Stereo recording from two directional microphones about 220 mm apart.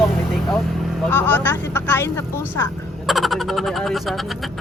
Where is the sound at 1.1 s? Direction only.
10° left (ahead or behind).